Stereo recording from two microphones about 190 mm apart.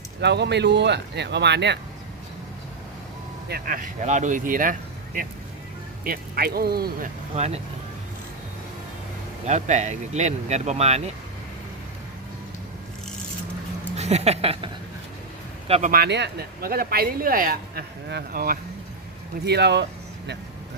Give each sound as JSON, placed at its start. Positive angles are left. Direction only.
{"t": 0.2, "sound": "speech", "side_deg": -60}
{"t": 3.5, "sound": "speech", "side_deg": -45}
{"t": 7.3, "sound": "speech", "side_deg": -35}
{"t": 9.5, "sound": "speech", "side_deg": -35}
{"t": 13.9, "sound": "speech", "side_deg": -35}
{"t": 15.9, "sound": "speech", "side_deg": -60}
{"t": 19.5, "sound": "speech", "side_deg": -60}